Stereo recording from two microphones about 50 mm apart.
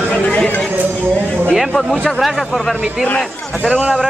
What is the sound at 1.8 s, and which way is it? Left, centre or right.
Speech, centre.